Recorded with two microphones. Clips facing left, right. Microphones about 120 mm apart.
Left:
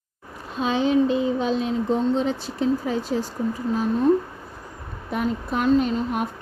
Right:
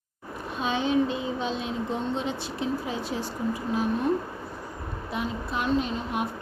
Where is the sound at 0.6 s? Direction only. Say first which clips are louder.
Left 5 dB; 35° left (ahead or behind).